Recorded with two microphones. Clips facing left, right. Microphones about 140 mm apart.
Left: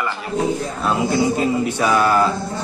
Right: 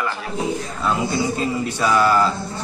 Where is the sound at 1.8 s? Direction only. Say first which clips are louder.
Even; 20° left (ahead or behind).